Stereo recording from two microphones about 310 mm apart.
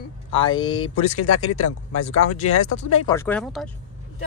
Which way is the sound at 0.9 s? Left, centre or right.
Left.